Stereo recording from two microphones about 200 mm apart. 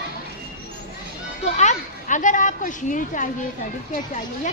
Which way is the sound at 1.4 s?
35° left (ahead or behind).